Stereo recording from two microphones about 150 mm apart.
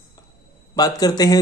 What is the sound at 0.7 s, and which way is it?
Speech, 25° left (ahead or behind).